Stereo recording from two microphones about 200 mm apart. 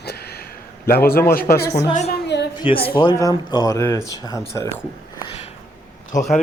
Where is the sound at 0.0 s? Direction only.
55° left (ahead or behind).